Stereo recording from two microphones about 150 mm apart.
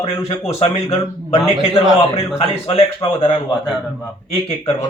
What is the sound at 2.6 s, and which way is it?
Speech, 40° left (ahead or behind).